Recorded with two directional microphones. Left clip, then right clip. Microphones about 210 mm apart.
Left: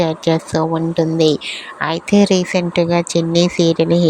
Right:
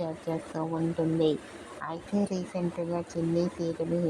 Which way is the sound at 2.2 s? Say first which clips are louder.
Left 17 dB; 50° left (ahead or behind).